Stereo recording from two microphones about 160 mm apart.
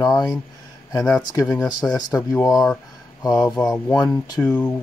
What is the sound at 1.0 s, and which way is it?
Speech, 5° left (ahead or behind).